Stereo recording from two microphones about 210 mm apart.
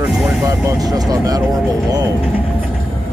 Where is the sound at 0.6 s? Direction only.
20° right (ahead or behind).